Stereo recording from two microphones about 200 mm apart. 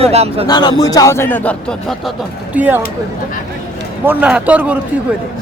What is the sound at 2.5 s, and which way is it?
Speech, 10° right (ahead or behind).